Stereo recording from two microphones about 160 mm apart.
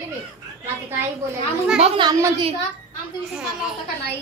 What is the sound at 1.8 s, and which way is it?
Speech, 35° right (ahead or behind).